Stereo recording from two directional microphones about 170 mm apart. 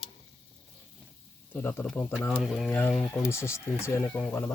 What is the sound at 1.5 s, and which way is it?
Speech, 10° left (ahead or behind).